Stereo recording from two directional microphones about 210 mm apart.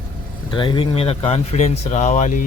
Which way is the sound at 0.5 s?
25° left (ahead or behind).